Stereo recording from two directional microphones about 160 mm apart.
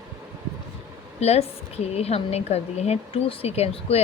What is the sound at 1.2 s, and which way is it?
A woman's voice, 40° left (ahead or behind).